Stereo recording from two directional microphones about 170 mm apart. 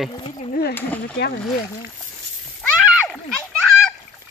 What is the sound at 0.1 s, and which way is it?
Speech, 30° left (ahead or behind).